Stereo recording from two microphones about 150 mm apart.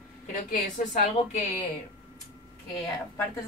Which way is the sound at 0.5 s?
55° left (ahead or behind).